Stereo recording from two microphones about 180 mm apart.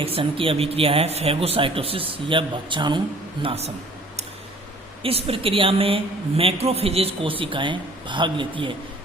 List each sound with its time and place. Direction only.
0.0 s speech: 30° right (ahead or behind)
5.0 s a woman's voice: 30° right (ahead or behind)